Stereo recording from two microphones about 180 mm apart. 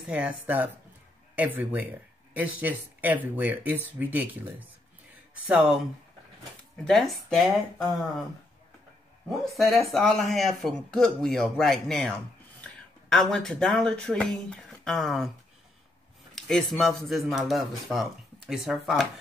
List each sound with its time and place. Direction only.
0.0 s speech: 10° right (ahead or behind)
6.8 s speech: centre (ahead or behind)
9.6 s speech: centre (ahead or behind)
16.3 s speech: centre (ahead or behind)